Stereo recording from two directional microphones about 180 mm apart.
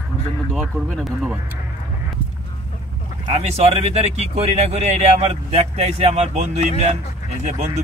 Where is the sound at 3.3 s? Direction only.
35° right (ahead or behind).